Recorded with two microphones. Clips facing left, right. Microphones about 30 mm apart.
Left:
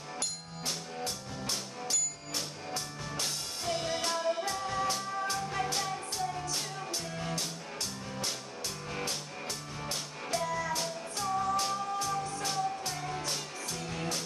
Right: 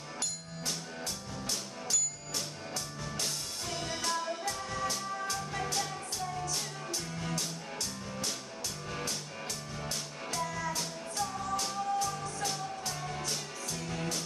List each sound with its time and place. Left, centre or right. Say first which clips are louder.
0.7 s music: left 2 dB; centre
9.8 s music: left 3 dB; centre